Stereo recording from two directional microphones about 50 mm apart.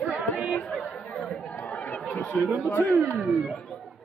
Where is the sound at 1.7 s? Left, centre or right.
Left.